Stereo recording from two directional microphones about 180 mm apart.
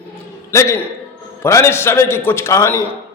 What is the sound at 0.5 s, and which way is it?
A man's voice, 15° left (ahead or behind).